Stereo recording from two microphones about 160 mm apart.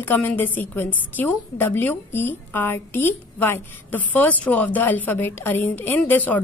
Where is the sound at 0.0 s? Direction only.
10° left (ahead or behind).